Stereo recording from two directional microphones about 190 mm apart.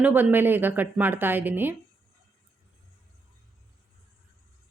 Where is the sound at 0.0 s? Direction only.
10° right (ahead or behind).